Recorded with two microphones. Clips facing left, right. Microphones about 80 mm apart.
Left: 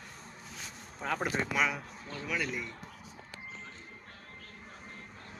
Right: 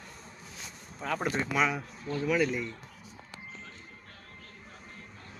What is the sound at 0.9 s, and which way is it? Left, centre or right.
Speech, centre.